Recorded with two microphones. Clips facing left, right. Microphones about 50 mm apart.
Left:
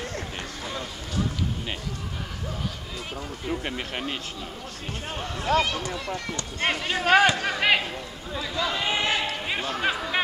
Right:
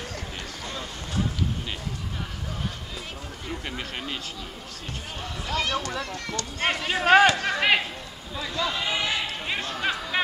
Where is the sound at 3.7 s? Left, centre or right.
Centre.